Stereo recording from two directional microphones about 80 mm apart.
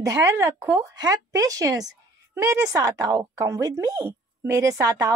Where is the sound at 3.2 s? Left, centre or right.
Right.